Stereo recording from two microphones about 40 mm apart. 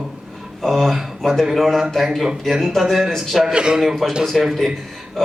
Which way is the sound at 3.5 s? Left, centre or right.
Right.